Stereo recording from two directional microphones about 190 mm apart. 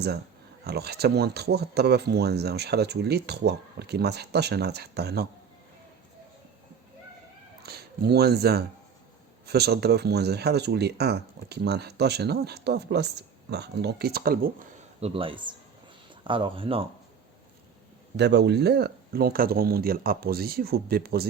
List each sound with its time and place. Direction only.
0.6 s speech: 55° right (ahead or behind)
7.6 s speech: 55° right (ahead or behind)
15.0 s a man's voice: 30° right (ahead or behind)
18.2 s speech: 65° right (ahead or behind)